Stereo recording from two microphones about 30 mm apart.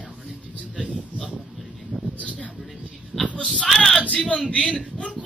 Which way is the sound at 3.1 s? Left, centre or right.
Centre.